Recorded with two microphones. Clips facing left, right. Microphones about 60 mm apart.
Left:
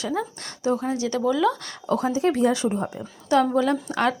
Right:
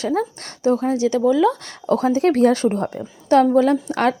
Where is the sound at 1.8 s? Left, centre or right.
Right.